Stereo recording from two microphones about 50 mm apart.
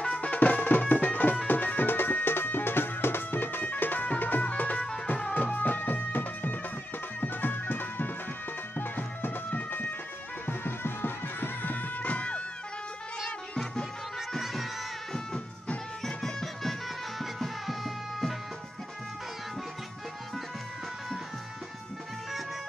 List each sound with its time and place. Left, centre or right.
0.0 s music: left
4.7 s music: centre
5.3 s music: left
10.4 s music: left
14.3 s music: centre
16.0 s music: centre